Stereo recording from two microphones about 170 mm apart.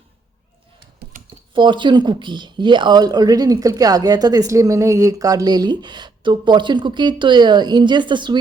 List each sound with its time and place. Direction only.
1.1 s computer keyboard: 50° right (ahead or behind)
1.5 s speech: 30° right (ahead or behind)